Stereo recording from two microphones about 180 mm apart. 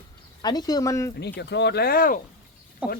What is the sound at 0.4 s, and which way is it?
Speech, 20° left (ahead or behind).